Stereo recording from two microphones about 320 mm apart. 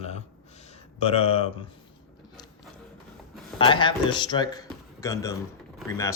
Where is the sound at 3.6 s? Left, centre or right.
Centre.